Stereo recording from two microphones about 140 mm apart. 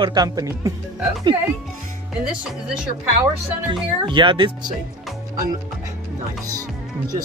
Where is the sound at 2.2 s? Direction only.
5° right (ahead or behind).